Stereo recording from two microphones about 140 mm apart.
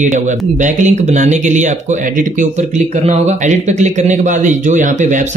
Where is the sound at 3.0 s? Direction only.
50° right (ahead or behind).